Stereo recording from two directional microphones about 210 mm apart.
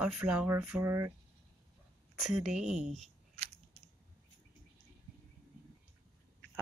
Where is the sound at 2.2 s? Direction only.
Centre (ahead or behind).